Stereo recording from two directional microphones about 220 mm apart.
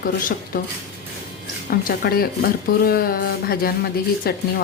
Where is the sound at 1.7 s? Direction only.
45° left (ahead or behind).